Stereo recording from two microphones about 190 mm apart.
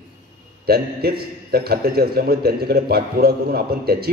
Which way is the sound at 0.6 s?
55° right (ahead or behind).